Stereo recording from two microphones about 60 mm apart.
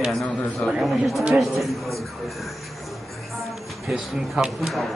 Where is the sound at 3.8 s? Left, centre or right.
Centre.